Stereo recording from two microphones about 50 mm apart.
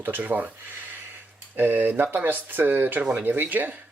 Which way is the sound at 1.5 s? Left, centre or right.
Right.